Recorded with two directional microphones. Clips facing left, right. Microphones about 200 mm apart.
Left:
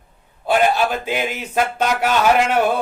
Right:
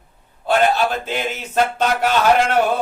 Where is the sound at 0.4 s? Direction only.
10° left (ahead or behind).